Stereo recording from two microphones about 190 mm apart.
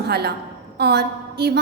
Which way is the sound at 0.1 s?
60° right (ahead or behind).